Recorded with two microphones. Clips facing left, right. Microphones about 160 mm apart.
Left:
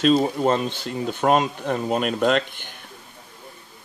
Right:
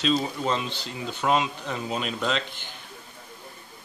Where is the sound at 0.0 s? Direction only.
50° left (ahead or behind).